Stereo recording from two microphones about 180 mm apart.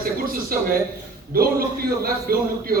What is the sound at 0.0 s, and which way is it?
A man's voice, 55° right (ahead or behind).